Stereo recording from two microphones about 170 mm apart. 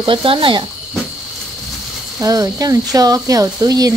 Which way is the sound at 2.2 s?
20° right (ahead or behind).